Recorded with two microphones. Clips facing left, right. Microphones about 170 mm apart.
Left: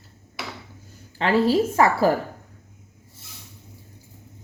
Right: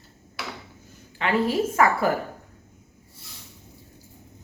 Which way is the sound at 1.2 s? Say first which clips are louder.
Left 4 dB; 30° left (ahead or behind).